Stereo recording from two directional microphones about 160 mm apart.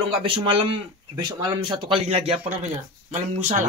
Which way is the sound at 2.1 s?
40° right (ahead or behind).